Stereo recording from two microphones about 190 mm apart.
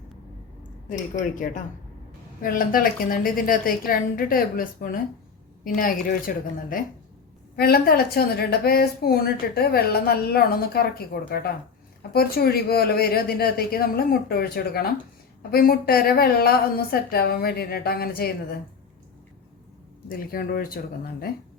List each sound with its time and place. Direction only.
0.9 s a woman's voice: 45° left (ahead or behind)
20.1 s a woman's voice: 50° left (ahead or behind)